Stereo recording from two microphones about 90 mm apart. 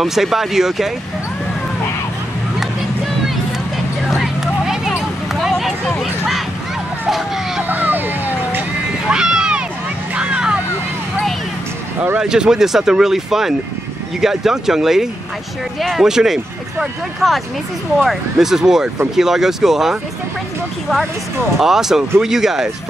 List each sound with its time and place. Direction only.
0.0 s speech: 5° right (ahead or behind)
3.7 s vehicle: 5° right (ahead or behind)
7.6 s vehicle: 20° right (ahead or behind)
9.1 s a sound: 10° right (ahead or behind)
10.1 s vehicle: 10° right (ahead or behind)
12.2 s speech: 5° right (ahead or behind)
21.5 s speech: 5° right (ahead or behind)